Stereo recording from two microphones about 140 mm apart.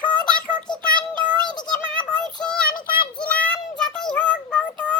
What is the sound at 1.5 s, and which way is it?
Synthetic singing, 30° left (ahead or behind).